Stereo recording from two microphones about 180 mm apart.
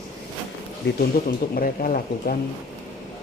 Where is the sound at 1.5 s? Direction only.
50° left (ahead or behind).